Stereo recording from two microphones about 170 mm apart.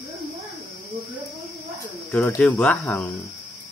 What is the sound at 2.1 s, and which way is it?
Speech, 10° left (ahead or behind).